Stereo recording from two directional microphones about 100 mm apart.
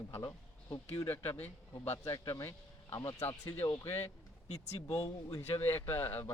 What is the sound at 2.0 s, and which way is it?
Speech, 35° left (ahead or behind).